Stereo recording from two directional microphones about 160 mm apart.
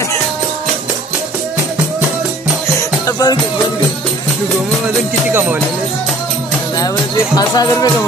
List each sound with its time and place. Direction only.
3.1 s music: 25° left (ahead or behind)
5.3 s speech: 15° right (ahead or behind)
7.3 s speech: 25° left (ahead or behind)